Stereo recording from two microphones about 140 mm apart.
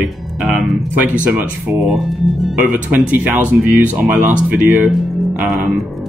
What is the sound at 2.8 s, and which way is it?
Speech, 10° right (ahead or behind).